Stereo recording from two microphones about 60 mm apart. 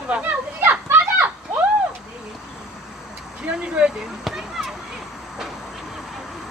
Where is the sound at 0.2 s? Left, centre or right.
Right.